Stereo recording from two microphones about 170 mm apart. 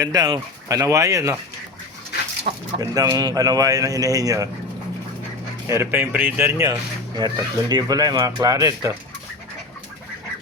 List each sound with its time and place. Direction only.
0.0 s speech: 20° right (ahead or behind)
2.5 s speech: 45° right (ahead or behind)
2.9 s speech: 20° right (ahead or behind)
5.6 s speech: 15° right (ahead or behind)